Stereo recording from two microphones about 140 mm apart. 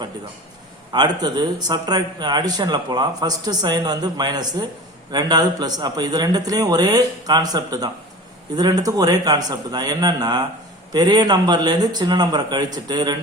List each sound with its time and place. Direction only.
0.9 s a man's voice: 30° right (ahead or behind)